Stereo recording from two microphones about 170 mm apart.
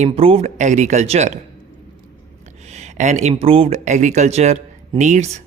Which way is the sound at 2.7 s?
40° right (ahead or behind).